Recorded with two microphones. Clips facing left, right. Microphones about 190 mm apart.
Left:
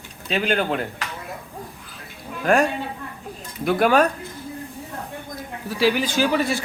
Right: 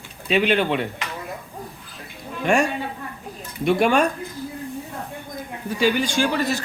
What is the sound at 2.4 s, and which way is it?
Speech, centre (ahead or behind).